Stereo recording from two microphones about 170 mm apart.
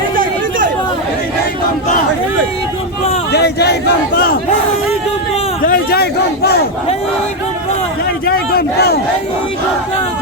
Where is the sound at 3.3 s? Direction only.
75° left (ahead or behind).